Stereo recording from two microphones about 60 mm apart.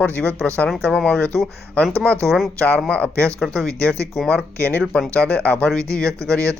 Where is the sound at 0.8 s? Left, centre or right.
Centre.